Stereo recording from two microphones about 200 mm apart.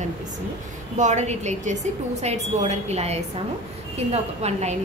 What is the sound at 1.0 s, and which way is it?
A woman's voice, 35° right (ahead or behind).